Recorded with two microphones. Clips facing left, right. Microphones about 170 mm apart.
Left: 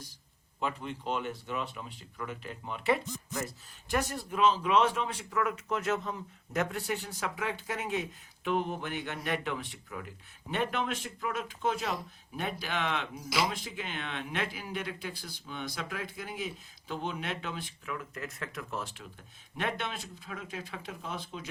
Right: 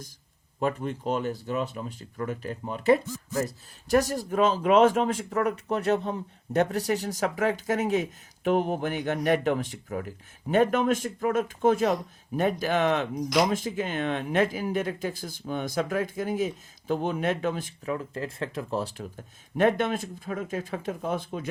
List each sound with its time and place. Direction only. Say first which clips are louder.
0.6 s speech: right 7 dB; 45° right (ahead or behind)
17.9 s speech: right 7 dB; 30° right (ahead or behind); by 21.4 s 50° right (ahead or behind)